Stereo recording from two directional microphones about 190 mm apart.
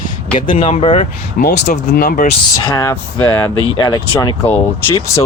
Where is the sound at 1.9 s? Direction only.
50° left (ahead or behind).